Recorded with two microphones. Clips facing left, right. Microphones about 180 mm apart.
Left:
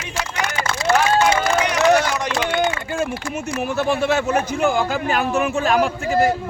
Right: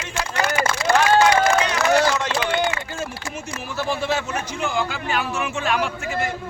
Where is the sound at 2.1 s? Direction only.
15° left (ahead or behind).